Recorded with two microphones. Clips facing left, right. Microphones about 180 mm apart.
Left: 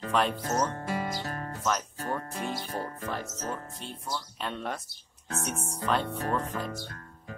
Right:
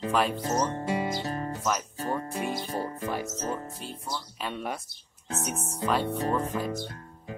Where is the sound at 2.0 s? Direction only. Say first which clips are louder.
Right 3 dB; 15° right (ahead or behind).